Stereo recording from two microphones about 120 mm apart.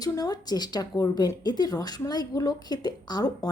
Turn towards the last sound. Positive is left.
turn(degrees=35)  # may be behind; listen again after turning